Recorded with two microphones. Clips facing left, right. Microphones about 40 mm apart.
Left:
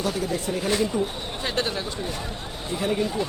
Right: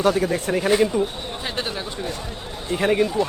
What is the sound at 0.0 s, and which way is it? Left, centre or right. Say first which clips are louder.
Speech: right 6 dB; right.